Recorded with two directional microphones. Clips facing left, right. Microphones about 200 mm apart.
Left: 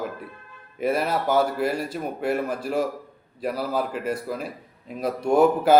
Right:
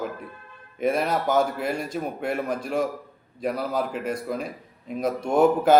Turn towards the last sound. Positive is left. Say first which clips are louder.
# left 1 dB
turn(degrees=5)  # may be behind; listen again after turning